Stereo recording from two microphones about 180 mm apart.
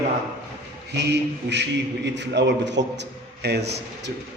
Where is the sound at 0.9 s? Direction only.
70° right (ahead or behind).